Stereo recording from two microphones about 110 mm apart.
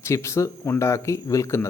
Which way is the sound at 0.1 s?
25° left (ahead or behind).